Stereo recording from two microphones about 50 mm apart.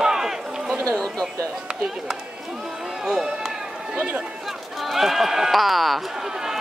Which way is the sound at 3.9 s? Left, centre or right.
Right.